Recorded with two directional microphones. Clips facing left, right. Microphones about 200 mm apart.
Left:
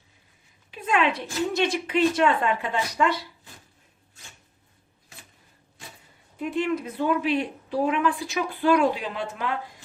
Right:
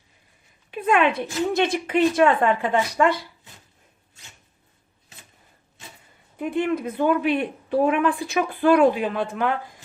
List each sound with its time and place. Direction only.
0.7 s a woman's voice: 55° right (ahead or behind)
6.4 s speech: 55° right (ahead or behind)